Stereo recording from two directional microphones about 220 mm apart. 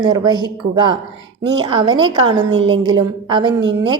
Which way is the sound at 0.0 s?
20° right (ahead or behind).